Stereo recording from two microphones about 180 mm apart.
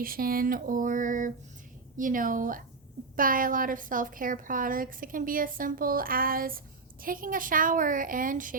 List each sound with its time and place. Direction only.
0.0 s a woman's voice: 55° right (ahead or behind)